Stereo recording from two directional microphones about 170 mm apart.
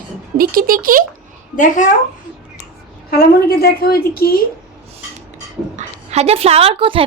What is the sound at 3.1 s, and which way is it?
A woman's voice, 60° left (ahead or behind).